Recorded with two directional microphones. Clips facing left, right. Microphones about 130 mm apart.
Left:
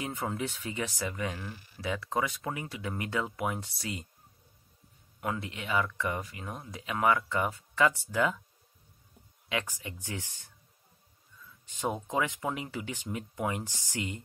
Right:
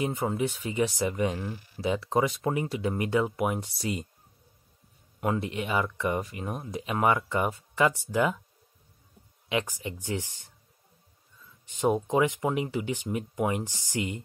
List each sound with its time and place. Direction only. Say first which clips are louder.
0.0 s speech: right 6 dB; 20° right (ahead or behind)
5.2 s speech: right 6 dB; 25° right (ahead or behind)
9.5 s speech: right 5 dB; 20° right (ahead or behind)
11.8 s speech: right 7 dB; 20° right (ahead or behind)